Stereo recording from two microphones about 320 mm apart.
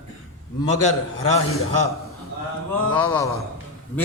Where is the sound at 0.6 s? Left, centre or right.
Centre.